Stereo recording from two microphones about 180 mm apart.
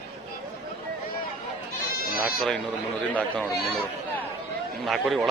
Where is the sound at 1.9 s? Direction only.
55° left (ahead or behind).